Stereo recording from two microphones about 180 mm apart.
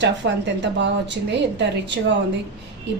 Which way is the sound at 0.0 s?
75° right (ahead or behind).